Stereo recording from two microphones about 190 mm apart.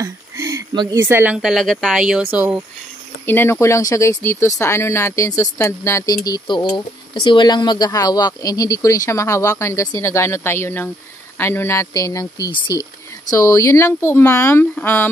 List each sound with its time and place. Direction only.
0.0 s speech: 15° right (ahead or behind)
3.3 s speech: 10° left (ahead or behind)